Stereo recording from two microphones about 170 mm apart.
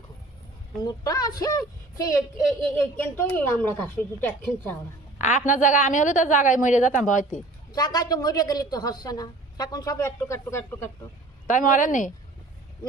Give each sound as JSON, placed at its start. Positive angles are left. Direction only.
{"t": 0.8, "sound": "a woman's voice", "side_deg": 20}
{"t": 5.1, "sound": "music", "side_deg": 45}
{"t": 5.5, "sound": "a woman's voice", "side_deg": 50}
{"t": 7.7, "sound": "a woman's voice", "side_deg": 20}
{"t": 11.4, "sound": "a woman's voice", "side_deg": 50}